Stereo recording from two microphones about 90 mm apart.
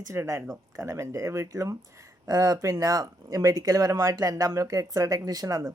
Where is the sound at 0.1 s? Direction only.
30° right (ahead or behind).